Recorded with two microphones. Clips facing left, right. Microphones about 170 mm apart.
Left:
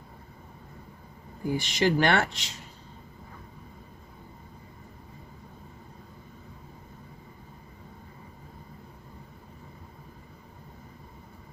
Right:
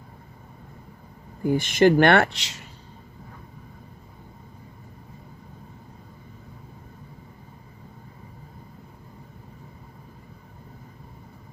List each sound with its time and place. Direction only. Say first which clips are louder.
1.5 s speech: right 8 dB; 50° right (ahead or behind); by 2.6 s 80° right